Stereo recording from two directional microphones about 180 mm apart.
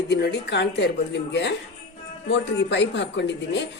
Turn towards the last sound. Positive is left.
turn(degrees=75)  # may be behind; listen again after turning